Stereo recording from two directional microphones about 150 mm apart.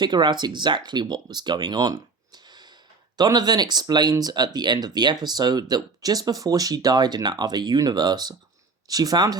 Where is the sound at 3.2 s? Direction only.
25° right (ahead or behind).